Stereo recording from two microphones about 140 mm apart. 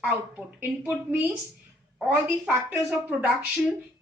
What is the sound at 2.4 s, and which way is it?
Speech, 5° right (ahead or behind).